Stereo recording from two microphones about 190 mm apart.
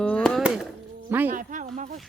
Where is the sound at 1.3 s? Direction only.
40° right (ahead or behind).